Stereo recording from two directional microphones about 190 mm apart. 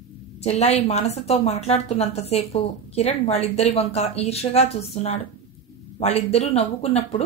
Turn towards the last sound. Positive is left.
turn(degrees=35)  # may be behind; listen again after turning